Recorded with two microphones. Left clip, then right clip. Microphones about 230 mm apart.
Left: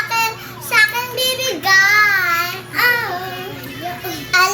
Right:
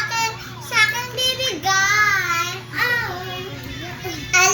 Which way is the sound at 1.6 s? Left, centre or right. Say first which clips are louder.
Left 7 dB; centre.